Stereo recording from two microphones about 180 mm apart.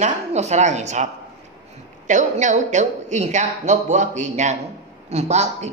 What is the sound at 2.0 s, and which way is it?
Speech, 45° right (ahead or behind).